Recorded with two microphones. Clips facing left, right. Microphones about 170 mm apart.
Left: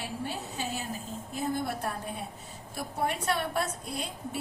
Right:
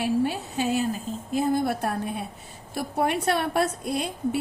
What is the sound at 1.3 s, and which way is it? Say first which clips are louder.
A woman's voice: right 8 dB; 90° right.